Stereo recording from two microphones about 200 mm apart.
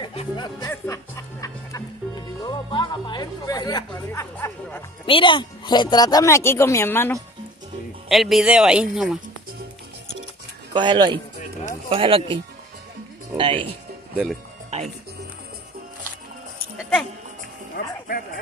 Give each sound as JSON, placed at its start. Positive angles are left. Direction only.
{"t": 0.0, "sound": "music", "side_deg": 25}
{"t": 0.6, "sound": "speech", "side_deg": 15}
{"t": 2.4, "sound": "music", "side_deg": 20}
{"t": 5.0, "sound": "speech", "side_deg": 25}
{"t": 8.1, "sound": "speech", "side_deg": 0}
{"t": 10.7, "sound": "speech", "side_deg": -25}
{"t": 13.4, "sound": "speech", "side_deg": -25}
{"t": 17.7, "sound": "music", "side_deg": 45}